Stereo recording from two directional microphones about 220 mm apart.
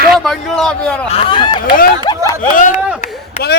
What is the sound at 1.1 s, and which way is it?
Speech, 25° left (ahead or behind).